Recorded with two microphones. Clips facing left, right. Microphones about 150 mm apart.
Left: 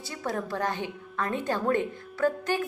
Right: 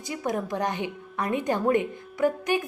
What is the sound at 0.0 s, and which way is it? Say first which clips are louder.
Speech: right 3 dB; 15° right (ahead or behind).